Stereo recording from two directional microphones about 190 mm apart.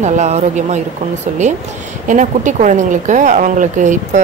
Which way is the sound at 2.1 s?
40° right (ahead or behind).